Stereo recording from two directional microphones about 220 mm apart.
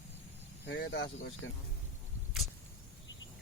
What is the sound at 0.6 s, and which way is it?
Speech, 50° left (ahead or behind).